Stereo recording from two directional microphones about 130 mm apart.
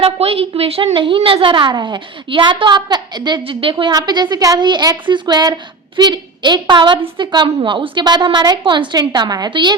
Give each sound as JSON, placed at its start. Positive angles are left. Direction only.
{"t": 0.0, "sound": "a woman's voice", "side_deg": -50}